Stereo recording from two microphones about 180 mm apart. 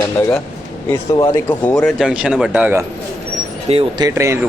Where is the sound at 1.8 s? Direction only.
5° right (ahead or behind).